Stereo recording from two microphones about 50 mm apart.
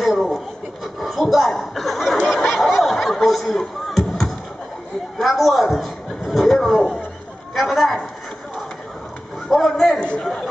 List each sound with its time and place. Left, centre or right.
0.0 s a sound: centre
7.5 s a man's voice: centre
9.5 s a man's voice: centre
9.9 s speech: left